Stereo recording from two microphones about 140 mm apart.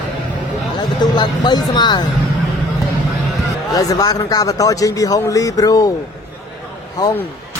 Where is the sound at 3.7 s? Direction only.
25° left (ahead or behind).